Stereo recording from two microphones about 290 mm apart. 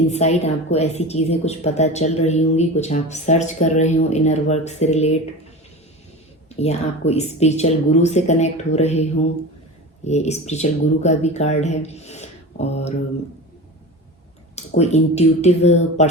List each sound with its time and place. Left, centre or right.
0.1 s a woman's voice: left
6.6 s a woman's voice: left
14.8 s a woman's voice: left